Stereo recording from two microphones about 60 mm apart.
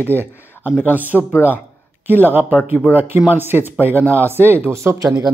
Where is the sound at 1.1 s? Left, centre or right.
Left.